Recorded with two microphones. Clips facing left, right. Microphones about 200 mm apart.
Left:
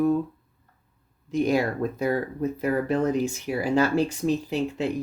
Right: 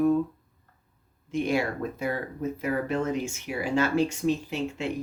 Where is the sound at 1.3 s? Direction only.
40° left (ahead or behind).